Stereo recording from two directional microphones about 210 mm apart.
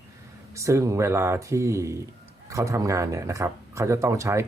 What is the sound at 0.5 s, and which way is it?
Speech, 15° right (ahead or behind).